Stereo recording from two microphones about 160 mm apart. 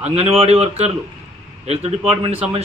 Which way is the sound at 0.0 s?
40° right (ahead or behind).